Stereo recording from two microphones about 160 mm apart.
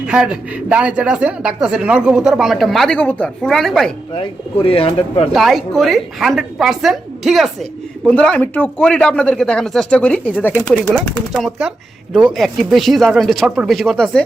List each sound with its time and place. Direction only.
0.1 s speech: 5° right (ahead or behind)
4.1 s speech: 35° left (ahead or behind)
5.3 s speech: centre (ahead or behind)